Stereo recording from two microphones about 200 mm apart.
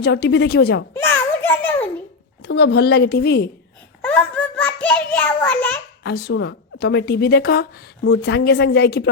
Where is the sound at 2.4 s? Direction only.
55° left (ahead or behind).